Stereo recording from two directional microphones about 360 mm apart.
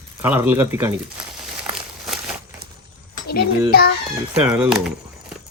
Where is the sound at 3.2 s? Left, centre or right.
Left.